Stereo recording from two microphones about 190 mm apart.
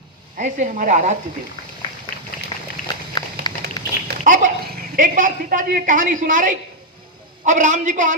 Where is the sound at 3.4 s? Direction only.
55° right (ahead or behind).